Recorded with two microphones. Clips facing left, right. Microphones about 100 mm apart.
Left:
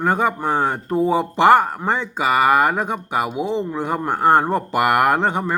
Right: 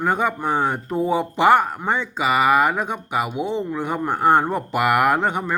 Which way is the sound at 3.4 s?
Centre (ahead or behind).